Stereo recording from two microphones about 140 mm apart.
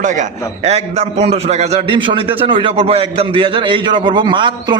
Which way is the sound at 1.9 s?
40° right (ahead or behind).